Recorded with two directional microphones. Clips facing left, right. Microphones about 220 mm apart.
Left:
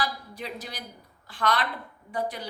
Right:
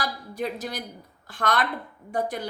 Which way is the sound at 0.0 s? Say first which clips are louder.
Right 3 dB; 45° right (ahead or behind).